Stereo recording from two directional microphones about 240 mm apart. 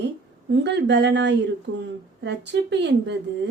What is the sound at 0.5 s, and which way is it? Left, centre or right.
Speech, right.